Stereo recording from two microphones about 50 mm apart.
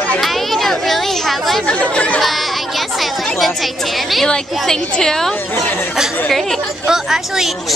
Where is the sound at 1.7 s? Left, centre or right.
Left.